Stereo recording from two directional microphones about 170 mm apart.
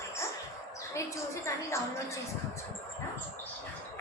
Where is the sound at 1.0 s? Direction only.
15° left (ahead or behind).